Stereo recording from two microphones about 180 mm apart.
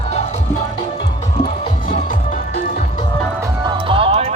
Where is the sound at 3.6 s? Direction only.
30° right (ahead or behind).